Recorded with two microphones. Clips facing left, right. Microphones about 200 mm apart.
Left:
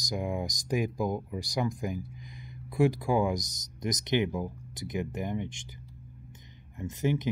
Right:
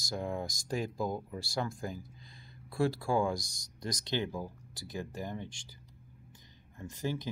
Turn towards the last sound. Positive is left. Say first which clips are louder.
# left 7 dB
turn(degrees=20)  # may be behind; listen again after turning